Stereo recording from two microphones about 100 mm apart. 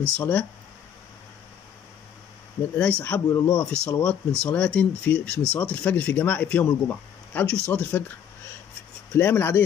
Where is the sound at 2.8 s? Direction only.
10° left (ahead or behind).